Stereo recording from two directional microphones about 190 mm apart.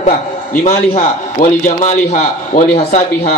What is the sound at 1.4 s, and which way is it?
A man's voice, 50° left (ahead or behind).